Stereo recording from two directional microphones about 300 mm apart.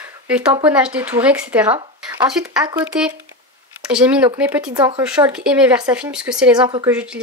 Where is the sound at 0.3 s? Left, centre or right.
Centre.